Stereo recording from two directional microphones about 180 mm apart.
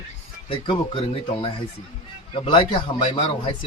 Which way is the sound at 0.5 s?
30° left (ahead or behind).